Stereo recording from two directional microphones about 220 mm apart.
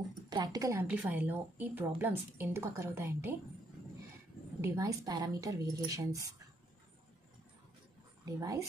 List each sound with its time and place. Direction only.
0.3 s a woman's voice: 20° right (ahead or behind)
4.6 s a woman's voice: 15° right (ahead or behind)
8.3 s a woman's voice: 15° right (ahead or behind)